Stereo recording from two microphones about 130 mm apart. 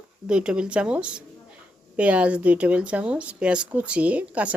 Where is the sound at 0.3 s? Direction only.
5° right (ahead or behind).